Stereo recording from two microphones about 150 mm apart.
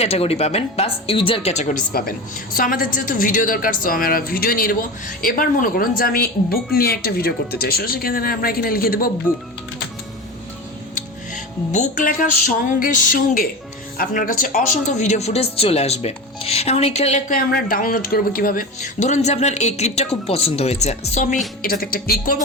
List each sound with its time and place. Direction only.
0.0 s speech: 40° left (ahead or behind)
1.9 s a woman's voice: 75° left (ahead or behind)
11.7 s speech: 55° left (ahead or behind)
21.6 s speech: 80° left